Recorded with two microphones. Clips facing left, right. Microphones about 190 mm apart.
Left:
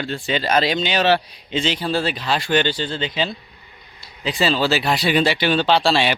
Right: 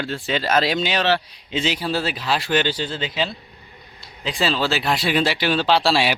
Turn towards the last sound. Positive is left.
turn(degrees=-5)  # may be behind; listen again after turning